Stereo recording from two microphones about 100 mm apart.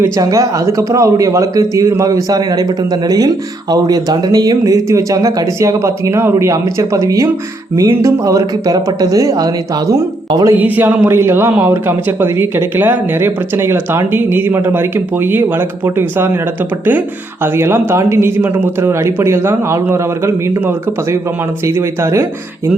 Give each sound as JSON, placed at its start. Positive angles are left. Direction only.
{"t": 0.0, "sound": "speech", "side_deg": -35}
{"t": 10.6, "sound": "speech", "side_deg": -20}
{"t": 17.4, "sound": "speech", "side_deg": -25}